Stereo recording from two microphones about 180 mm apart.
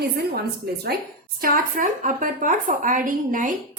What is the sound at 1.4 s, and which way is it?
A woman's voice, 50° right (ahead or behind).